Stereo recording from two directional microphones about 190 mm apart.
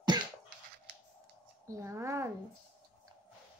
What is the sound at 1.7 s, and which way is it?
Speech, 15° right (ahead or behind).